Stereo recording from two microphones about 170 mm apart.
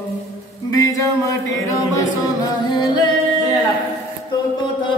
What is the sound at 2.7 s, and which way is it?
Music, 25° left (ahead or behind).